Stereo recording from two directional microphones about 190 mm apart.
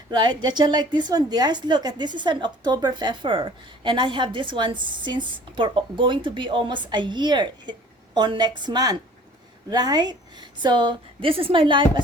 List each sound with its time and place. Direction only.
0.1 s a woman's voice: 25° right (ahead or behind)